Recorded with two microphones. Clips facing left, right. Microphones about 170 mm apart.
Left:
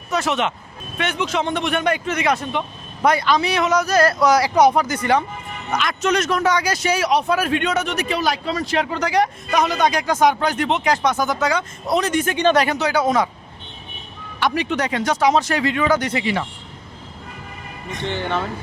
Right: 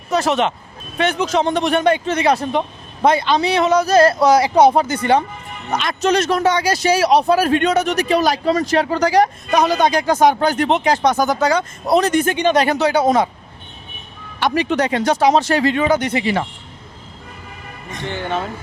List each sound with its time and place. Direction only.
0.1 s a man's voice: 35° right (ahead or behind)
14.3 s a man's voice: 30° right (ahead or behind)
16.2 s speech: 40° right (ahead or behind)
18.1 s speech: 15° right (ahead or behind)